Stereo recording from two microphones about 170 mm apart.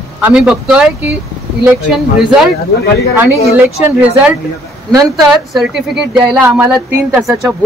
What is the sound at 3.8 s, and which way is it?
Speech, 10° right (ahead or behind).